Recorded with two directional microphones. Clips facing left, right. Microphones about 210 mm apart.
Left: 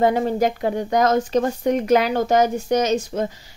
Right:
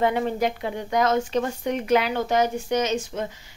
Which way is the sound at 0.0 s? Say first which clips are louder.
Left 4 dB; 40° left (ahead or behind).